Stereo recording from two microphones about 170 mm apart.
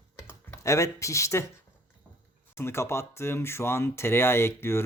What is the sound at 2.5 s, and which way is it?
Speech, 15° left (ahead or behind).